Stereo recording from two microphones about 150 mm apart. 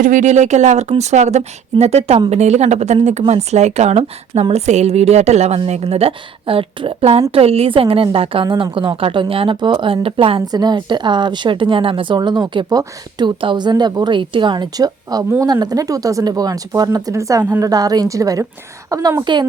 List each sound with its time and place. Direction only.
0.0 s a woman's voice: 55° right (ahead or behind); by 19.5 s 30° right (ahead or behind)